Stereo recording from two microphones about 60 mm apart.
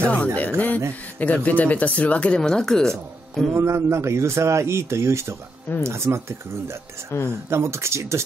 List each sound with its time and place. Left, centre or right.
0.0 s speech: left
0.4 s a sound: left
1.2 s speech: left; by 3.4 s centre
3.5 s speech: right
7.1 s speech: left
7.4 s speech: right